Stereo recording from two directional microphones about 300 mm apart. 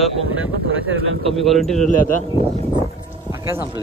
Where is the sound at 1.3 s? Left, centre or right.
Centre.